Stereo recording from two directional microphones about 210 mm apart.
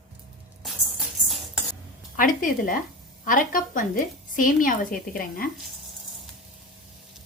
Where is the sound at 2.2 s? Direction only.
40° left (ahead or behind).